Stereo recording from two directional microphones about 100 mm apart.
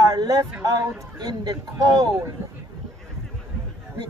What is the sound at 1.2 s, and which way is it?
Speech, 45° right (ahead or behind).